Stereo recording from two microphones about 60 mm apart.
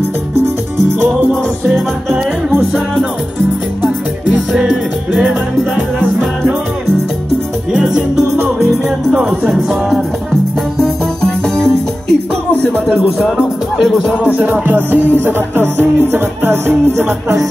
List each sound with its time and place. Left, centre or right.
4.3 s music: centre
5.8 s music: right
7.7 s music: centre
9.5 s music: centre
11.2 s music: centre
13.7 s music: centre
14.4 s music: right
15.0 s music: left
15.8 s music: right